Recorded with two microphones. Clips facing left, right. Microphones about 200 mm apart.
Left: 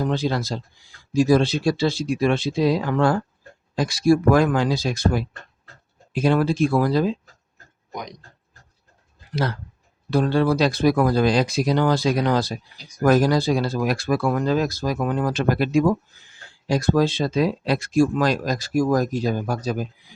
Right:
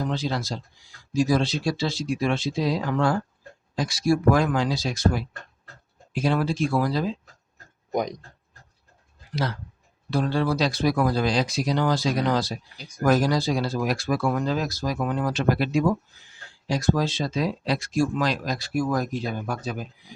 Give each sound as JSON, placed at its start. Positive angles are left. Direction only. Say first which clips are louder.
{"t": 0.1, "sound": "speech", "louder": "left 4 dB", "side_deg": 55}
{"t": 6.2, "sound": "speech", "louder": "left 5 dB", "side_deg": 55}
{"t": 9.3, "sound": "speech", "louder": "left 3 dB", "side_deg": 55}